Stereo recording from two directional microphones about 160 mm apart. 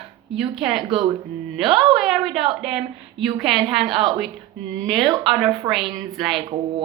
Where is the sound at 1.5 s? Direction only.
Centre (ahead or behind).